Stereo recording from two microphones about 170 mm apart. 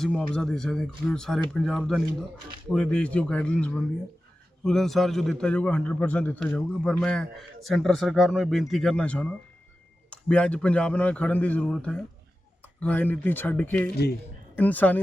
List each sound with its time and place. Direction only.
0.0 s a man's voice: 5° left (ahead or behind)
13.9 s speech: 70° left (ahead or behind)
14.6 s speech: 10° left (ahead or behind)